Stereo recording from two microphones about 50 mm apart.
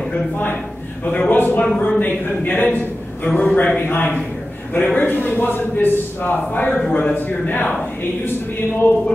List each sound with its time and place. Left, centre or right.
1.0 s a man's voice: left
1.3 s a man's voice: left
3.9 s a man's voice: left
6.9 s a man's voice: left
7.2 s a man's voice: left